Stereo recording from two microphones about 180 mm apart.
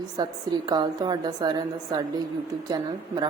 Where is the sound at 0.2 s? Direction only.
25° right (ahead or behind).